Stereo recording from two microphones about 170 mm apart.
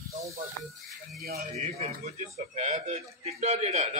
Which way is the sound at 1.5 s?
40° right (ahead or behind).